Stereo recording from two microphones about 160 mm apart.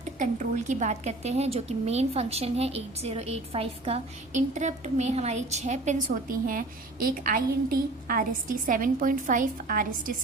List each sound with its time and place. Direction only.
0.0 s a woman's voice: 50° right (ahead or behind)
6.4 s a woman's voice: 60° right (ahead or behind)